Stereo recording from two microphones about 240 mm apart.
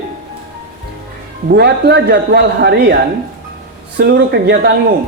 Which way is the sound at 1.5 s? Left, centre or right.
Right.